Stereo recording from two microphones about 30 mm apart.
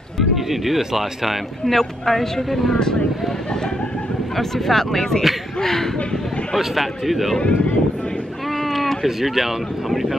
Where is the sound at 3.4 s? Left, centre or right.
Left.